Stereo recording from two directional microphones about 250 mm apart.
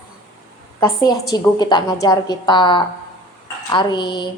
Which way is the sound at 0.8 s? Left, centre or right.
Centre.